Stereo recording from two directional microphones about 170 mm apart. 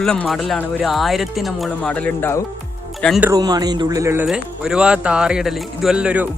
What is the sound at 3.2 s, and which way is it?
Speech, 20° right (ahead or behind).